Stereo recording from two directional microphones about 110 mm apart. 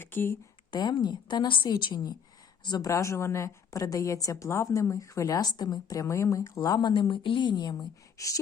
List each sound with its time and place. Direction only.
0.0 s speech: 20° left (ahead or behind)
0.7 s a woman's voice: 40° left (ahead or behind)
2.9 s a woman's voice: 25° left (ahead or behind)